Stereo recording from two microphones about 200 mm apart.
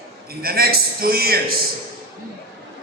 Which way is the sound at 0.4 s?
50° right (ahead or behind).